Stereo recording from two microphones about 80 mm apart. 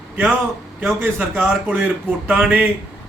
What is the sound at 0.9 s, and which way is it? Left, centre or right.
A man's voice, right.